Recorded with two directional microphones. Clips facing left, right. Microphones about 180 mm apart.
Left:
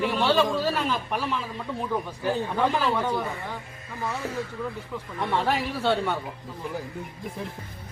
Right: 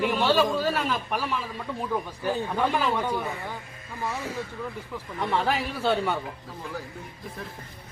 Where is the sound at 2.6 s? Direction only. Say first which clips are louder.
Left 1 dB; 10° right (ahead or behind).